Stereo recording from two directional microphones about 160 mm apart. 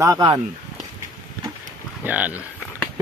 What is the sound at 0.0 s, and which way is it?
Speech, 20° right (ahead or behind).